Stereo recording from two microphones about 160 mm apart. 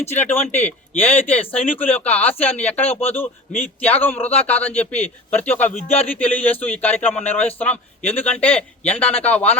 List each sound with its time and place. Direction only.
0.1 s a man's voice: 15° left (ahead or behind)
5.6 s speech: 40° left (ahead or behind)
6.1 s a man's voice: 10° left (ahead or behind)